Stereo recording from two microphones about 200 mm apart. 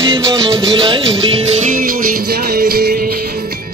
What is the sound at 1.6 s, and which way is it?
Music, 45° right (ahead or behind).